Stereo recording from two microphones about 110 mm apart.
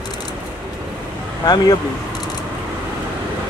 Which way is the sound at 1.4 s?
40° left (ahead or behind).